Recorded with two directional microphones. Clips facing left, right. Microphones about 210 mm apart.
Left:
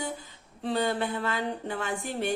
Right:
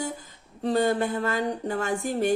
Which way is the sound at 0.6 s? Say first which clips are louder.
Right 5 dB; 45° right (ahead or behind).